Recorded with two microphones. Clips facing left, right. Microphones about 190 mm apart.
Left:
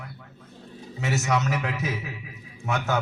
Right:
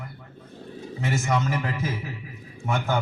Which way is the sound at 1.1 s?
80° left.